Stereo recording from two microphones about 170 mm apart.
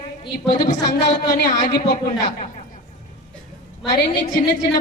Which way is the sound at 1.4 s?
55° left (ahead or behind).